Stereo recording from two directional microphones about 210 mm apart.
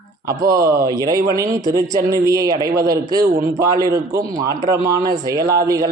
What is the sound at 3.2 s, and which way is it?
Speech, 45° right (ahead or behind).